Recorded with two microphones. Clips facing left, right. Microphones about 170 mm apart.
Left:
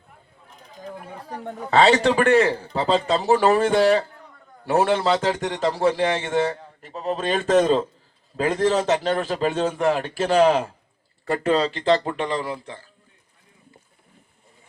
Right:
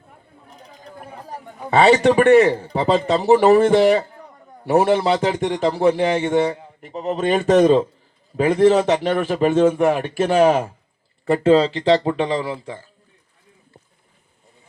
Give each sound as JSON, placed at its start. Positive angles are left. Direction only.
{"t": 1.7, "sound": "a man's voice", "side_deg": -15}